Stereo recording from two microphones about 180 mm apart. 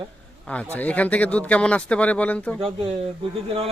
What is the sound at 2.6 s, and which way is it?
Speech, 35° right (ahead or behind).